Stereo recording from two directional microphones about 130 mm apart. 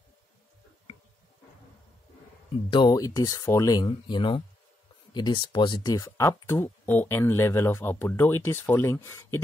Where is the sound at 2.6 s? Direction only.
35° left (ahead or behind).